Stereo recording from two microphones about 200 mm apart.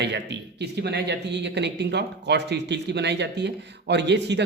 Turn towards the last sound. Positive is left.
turn(degrees=-60)  # may be behind; listen again after turning